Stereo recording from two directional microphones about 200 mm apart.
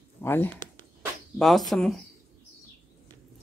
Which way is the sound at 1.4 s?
Centre (ahead or behind).